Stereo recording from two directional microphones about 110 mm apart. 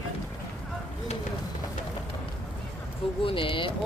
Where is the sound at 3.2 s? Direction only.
55° left (ahead or behind).